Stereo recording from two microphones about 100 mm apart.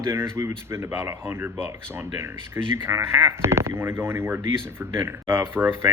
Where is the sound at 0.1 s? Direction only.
25° right (ahead or behind).